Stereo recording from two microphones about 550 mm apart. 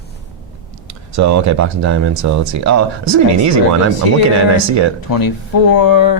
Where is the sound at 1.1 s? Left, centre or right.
Right.